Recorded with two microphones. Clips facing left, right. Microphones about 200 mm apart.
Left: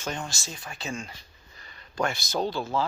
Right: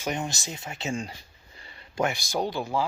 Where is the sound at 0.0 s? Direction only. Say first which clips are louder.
Right 4 dB; 20° right (ahead or behind).